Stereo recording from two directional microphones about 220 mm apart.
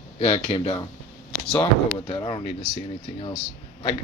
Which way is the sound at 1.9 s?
20° left (ahead or behind).